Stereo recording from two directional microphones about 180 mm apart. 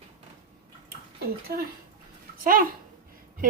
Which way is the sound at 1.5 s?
60° right (ahead or behind).